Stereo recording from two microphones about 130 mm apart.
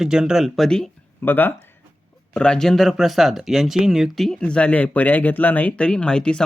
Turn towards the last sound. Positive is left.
turn(degrees=5)  # may be behind; listen again after turning